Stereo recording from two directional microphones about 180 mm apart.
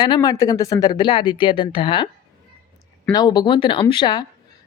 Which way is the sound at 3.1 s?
25° left (ahead or behind).